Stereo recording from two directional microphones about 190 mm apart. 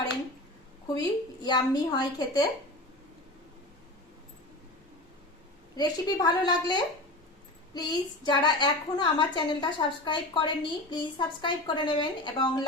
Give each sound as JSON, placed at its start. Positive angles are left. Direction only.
{"t": 0.9, "sound": "a woman's voice", "side_deg": 20}
{"t": 5.7, "sound": "a woman's voice", "side_deg": 20}